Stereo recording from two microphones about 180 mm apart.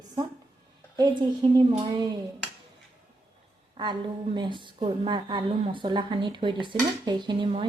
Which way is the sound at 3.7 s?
25° right (ahead or behind).